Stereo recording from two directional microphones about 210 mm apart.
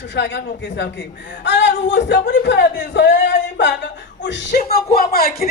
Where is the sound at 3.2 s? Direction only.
55° left (ahead or behind).